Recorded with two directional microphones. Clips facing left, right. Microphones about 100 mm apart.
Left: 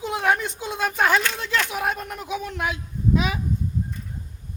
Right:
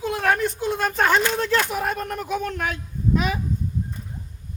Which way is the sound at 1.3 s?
40° right (ahead or behind).